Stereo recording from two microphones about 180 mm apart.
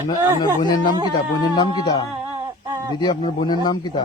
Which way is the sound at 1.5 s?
20° left (ahead or behind).